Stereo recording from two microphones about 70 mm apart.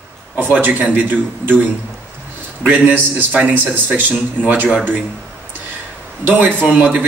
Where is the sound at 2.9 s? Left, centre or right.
Right.